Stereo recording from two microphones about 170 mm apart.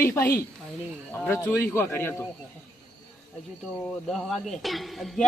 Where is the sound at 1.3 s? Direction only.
15° left (ahead or behind).